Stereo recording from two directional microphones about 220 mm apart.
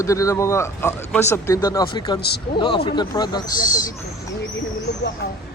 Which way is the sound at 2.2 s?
45° left (ahead or behind).